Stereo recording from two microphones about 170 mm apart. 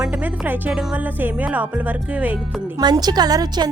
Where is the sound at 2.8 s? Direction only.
25° right (ahead or behind).